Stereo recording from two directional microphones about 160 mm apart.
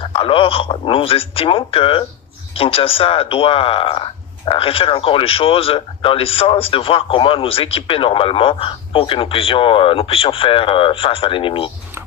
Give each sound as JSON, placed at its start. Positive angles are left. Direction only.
{"t": 0.0, "sound": "speech", "side_deg": 35}